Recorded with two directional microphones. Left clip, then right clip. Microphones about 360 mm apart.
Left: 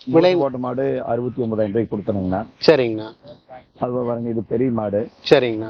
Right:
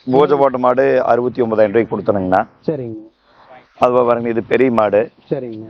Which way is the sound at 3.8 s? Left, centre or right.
Centre.